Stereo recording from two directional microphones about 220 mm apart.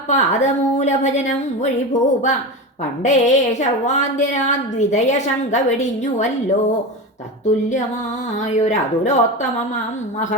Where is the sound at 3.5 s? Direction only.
30° left (ahead or behind).